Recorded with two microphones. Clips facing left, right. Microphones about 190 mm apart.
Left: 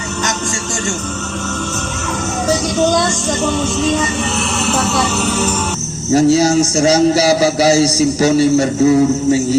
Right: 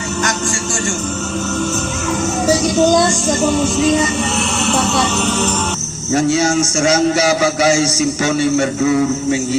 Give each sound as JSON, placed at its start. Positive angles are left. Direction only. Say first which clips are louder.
{"t": 3.4, "sound": "music", "louder": "right 2 dB", "side_deg": 0}
{"t": 6.1, "sound": "a man's voice", "louder": "left 4 dB", "side_deg": 35}